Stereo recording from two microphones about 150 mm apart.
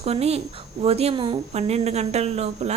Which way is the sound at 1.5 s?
45° right (ahead or behind).